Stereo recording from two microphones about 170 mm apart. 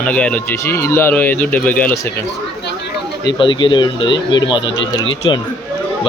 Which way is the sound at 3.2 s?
25° left (ahead or behind).